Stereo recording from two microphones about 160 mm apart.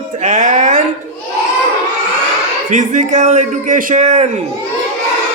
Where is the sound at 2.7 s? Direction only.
50° right (ahead or behind).